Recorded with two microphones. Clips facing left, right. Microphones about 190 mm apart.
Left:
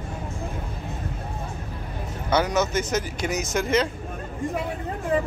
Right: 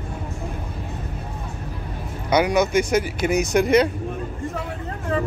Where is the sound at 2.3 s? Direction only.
15° right (ahead or behind).